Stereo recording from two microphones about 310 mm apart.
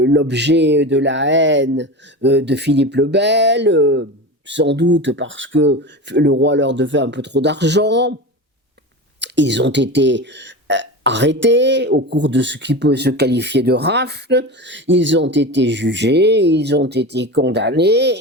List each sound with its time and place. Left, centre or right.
0.0 s speech: right
9.2 s speech: right